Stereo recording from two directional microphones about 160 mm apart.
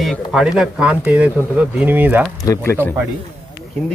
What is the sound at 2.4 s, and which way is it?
Speech, 20° left (ahead or behind).